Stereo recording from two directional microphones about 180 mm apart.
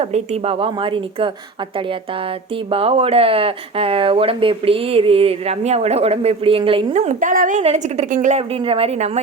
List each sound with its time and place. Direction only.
0.0 s a woman's voice: 35° right (ahead or behind)
2.6 s speech: 30° right (ahead or behind)
6.9 s speech: 40° right (ahead or behind)